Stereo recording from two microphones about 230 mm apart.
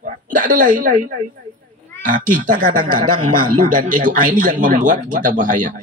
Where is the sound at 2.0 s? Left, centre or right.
Right.